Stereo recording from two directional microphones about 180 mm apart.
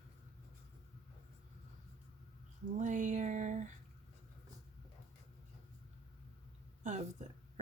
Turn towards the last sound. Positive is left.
turn(degrees=-40)  # may be behind; listen again after turning